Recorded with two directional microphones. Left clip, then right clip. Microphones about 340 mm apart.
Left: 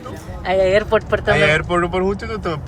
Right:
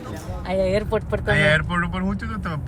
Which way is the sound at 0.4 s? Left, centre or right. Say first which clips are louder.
Left 7 dB; left.